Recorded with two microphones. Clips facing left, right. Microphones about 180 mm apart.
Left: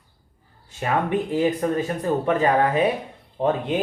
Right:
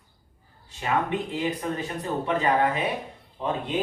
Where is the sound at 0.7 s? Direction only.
45° left (ahead or behind).